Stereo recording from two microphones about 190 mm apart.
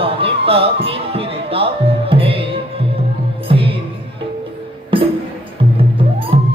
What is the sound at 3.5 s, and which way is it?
Music, 30° right (ahead or behind).